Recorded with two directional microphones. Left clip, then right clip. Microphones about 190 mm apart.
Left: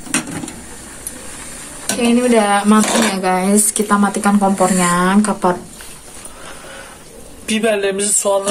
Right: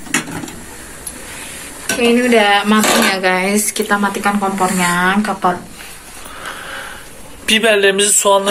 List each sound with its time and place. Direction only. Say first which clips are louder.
2.0 s speech: right 2 dB; 55° left (ahead or behind)
7.4 s speech: right 5 dB; centre (ahead or behind)